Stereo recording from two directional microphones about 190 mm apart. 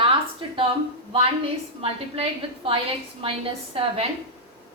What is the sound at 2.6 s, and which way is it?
A woman's voice, 30° right (ahead or behind).